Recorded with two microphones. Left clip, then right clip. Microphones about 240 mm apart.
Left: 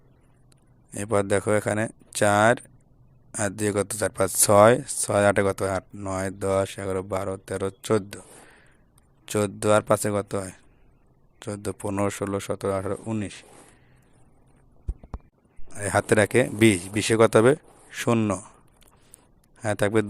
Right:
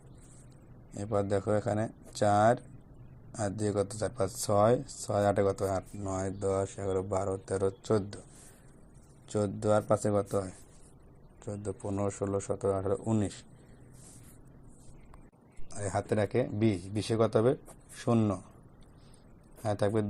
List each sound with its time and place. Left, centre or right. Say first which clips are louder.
1.3 s speech: left 7 dB; left
3.3 s speech: left 7 dB; left
3.6 s speech: left 6 dB; left
7.9 s speech: left 6 dB; left
9.3 s speech: left 7 dB; left
11.6 s speech: left 7 dB; left
15.7 s speech: left 10 dB; left
19.6 s speech: left 7 dB; left